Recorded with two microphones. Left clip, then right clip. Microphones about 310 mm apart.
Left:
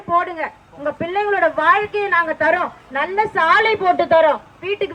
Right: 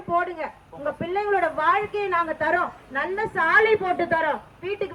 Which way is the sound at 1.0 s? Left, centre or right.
Left.